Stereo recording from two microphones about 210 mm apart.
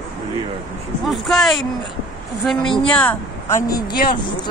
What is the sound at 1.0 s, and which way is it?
Speech, centre (ahead or behind).